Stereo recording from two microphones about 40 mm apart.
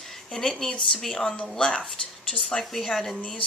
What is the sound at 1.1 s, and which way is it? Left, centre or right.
Speech, left.